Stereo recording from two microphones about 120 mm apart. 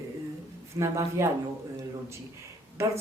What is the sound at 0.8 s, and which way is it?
Speech, 25° right (ahead or behind).